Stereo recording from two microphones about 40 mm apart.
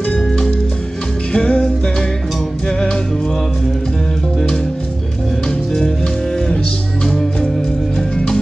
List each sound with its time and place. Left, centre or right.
1.3 s music: left